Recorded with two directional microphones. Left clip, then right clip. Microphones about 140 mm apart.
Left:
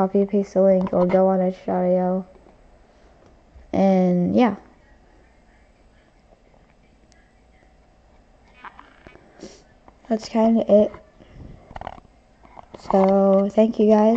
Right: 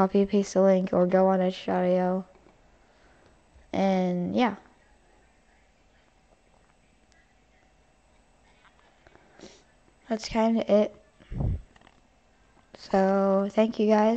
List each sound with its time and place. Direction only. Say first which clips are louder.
0.0 s speech: left 3 dB; 60° right (ahead or behind)
3.7 s speech: left 7 dB; centre (ahead or behind)
9.0 s a sound: left 5 dB; 5° left (ahead or behind)
10.0 s speech: left 6 dB; centre (ahead or behind)
12.7 s speech: left 6 dB; 5° right (ahead or behind)